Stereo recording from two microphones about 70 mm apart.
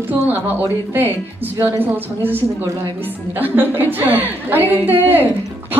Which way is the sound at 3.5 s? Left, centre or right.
Right.